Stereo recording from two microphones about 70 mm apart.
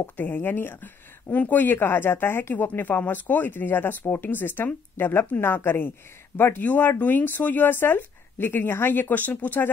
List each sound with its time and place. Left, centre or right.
0.0 s speech: left